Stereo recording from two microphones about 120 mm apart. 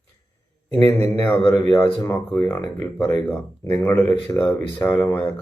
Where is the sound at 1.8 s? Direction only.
15° left (ahead or behind).